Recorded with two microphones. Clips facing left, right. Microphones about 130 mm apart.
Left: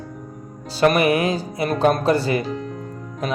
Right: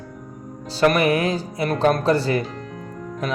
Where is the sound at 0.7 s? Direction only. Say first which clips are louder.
Left 1 dB; 15° left (ahead or behind).